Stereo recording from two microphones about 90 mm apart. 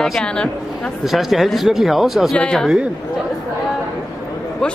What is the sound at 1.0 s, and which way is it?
Speech, centre (ahead or behind).